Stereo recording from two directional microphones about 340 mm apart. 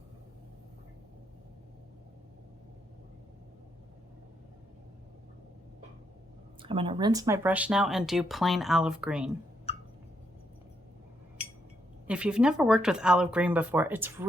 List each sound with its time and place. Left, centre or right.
6.6 s speech: centre
9.7 s a sound: centre
12.0 s speech: centre